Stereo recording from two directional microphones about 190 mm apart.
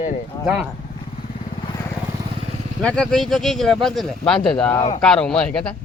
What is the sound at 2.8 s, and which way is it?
Speech, 5° left (ahead or behind).